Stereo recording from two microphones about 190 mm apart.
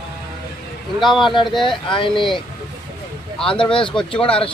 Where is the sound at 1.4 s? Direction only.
Centre (ahead or behind).